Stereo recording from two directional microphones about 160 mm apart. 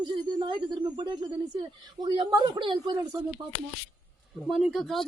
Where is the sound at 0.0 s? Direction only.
30° right (ahead or behind).